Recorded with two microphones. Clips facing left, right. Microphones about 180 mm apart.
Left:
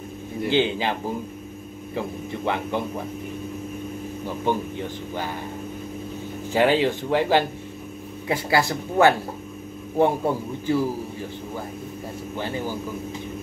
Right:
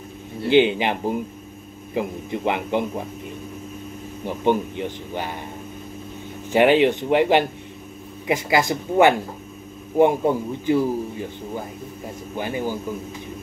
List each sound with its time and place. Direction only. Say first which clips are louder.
0.5 s a man's voice: right 5 dB; 15° right (ahead or behind)
4.5 s speech: right 5 dB; 20° right (ahead or behind)
6.5 s a man's voice: right 4 dB; 20° right (ahead or behind)
12.4 s a man's voice: right 3 dB; 15° right (ahead or behind)